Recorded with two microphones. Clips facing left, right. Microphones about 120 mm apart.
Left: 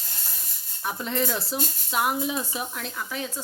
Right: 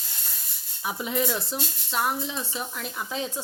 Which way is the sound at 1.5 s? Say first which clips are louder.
Left 2 dB; 5° left (ahead or behind).